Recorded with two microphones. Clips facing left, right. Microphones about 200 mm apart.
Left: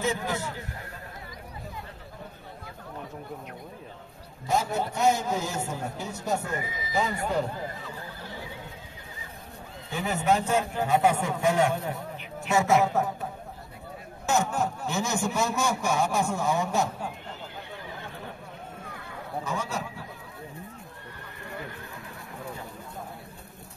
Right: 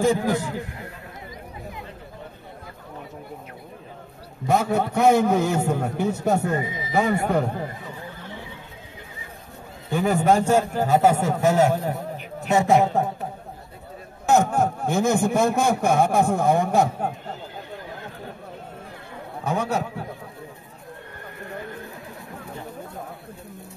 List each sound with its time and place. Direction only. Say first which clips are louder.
4.5 s a man's voice: right 6 dB; 60° right (ahead or behind)
6.5 s speech: right 7 dB; 30° right (ahead or behind)
6.9 s a man's voice: right 7 dB; 60° right (ahead or behind)
9.8 s a man's voice: right 7 dB; 50° right (ahead or behind); by 13.1 s 30° right (ahead or behind)
14.2 s a man's voice: right 7 dB; 55° right (ahead or behind)
19.4 s a man's voice: right 10 dB; 60° right (ahead or behind)